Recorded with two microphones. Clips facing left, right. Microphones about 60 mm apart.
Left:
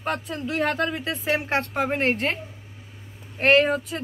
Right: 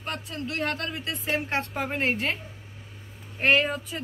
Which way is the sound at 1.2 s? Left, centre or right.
Left.